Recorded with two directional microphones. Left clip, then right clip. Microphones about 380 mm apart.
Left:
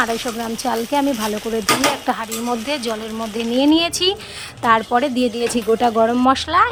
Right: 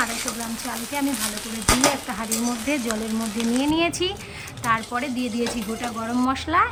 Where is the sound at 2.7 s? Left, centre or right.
Centre.